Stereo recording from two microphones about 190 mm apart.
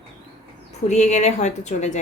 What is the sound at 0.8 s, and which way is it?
A woman's voice, 40° left (ahead or behind).